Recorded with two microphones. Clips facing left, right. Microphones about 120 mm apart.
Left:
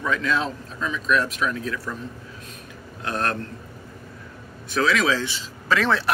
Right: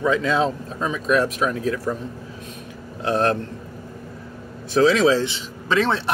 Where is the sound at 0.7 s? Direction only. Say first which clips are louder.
Right 3 dB; 45° right (ahead or behind).